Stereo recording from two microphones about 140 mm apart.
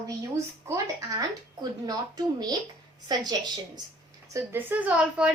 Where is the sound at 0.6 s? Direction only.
25° right (ahead or behind).